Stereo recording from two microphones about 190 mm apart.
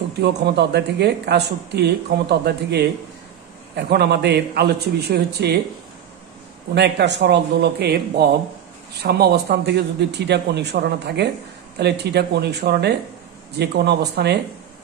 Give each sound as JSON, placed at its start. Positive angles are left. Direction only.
{"t": 0.2, "sound": "speech", "side_deg": -60}
{"t": 6.7, "sound": "speech", "side_deg": -65}